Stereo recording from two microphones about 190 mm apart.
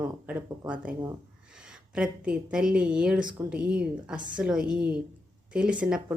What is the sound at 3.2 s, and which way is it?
Speech, 25° right (ahead or behind).